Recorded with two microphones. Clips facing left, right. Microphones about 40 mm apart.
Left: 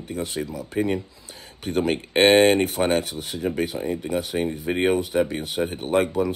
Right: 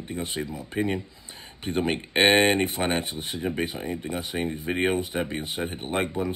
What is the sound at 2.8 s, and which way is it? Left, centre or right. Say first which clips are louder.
Speech: left 4 dB; right.